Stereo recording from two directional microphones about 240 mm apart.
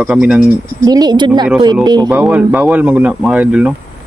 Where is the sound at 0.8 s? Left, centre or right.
Centre.